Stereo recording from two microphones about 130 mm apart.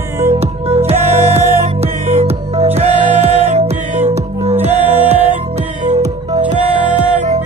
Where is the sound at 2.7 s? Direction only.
55° right (ahead or behind).